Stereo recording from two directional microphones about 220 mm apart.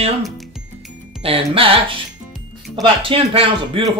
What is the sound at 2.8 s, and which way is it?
Speech, 25° right (ahead or behind).